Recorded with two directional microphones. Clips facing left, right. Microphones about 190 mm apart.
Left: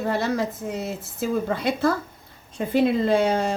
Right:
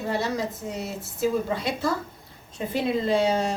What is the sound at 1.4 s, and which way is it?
A woman's voice, 55° left (ahead or behind).